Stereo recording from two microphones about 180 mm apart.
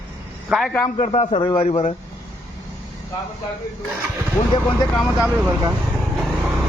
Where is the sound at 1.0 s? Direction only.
40° left (ahead or behind).